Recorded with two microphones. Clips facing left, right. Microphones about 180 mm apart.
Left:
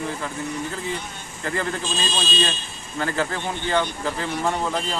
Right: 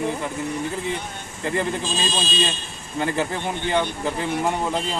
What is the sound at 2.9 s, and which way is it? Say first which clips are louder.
Speech: right 1 dB; 15° right (ahead or behind).